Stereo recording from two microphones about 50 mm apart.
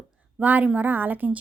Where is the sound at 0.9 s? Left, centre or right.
Right.